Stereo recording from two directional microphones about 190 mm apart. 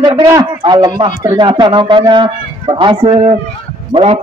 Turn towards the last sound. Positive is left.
turn(degrees=-30)  # may be behind; listen again after turning